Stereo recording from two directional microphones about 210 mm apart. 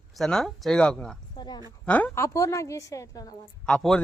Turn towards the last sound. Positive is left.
turn(degrees=5)  # may be behind; listen again after turning